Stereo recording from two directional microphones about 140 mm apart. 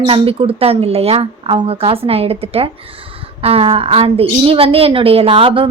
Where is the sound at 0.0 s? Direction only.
40° right (ahead or behind).